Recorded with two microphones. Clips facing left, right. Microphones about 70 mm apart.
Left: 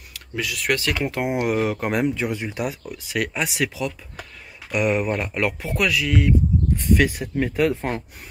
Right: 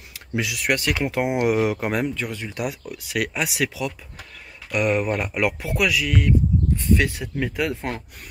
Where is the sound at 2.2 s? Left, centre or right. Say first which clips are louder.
Left 4 dB; centre.